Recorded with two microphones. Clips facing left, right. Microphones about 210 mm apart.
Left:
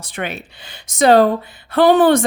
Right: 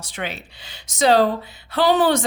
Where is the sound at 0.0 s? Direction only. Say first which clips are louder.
Left 4 dB; 55° left (ahead or behind).